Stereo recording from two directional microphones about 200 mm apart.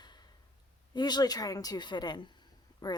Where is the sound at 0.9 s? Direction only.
20° left (ahead or behind).